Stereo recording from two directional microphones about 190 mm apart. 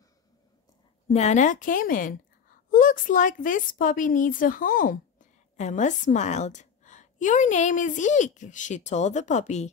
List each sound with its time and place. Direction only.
1.0 s a woman's voice: 35° left (ahead or behind)